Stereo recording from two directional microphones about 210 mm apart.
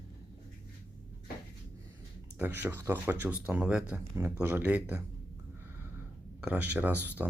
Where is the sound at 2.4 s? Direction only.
10° right (ahead or behind).